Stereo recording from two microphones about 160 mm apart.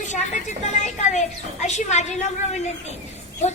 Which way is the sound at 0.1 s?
50° left (ahead or behind).